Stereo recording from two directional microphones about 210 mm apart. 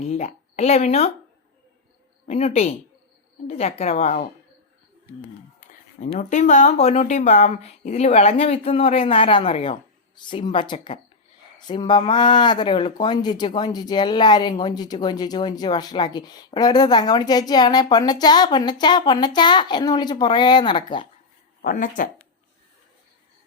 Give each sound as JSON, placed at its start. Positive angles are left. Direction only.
{"t": 0.0, "sound": "speech", "side_deg": 30}
{"t": 2.2, "sound": "speech", "side_deg": 30}
{"t": 5.5, "sound": "speech", "side_deg": 35}
{"t": 21.6, "sound": "speech", "side_deg": 40}